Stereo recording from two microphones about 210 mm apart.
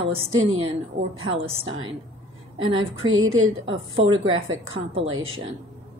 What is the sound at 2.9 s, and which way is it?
A woman's voice, 75° right (ahead or behind).